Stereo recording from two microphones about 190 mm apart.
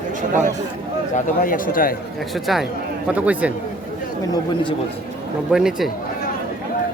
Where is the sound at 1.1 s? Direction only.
45° left (ahead or behind).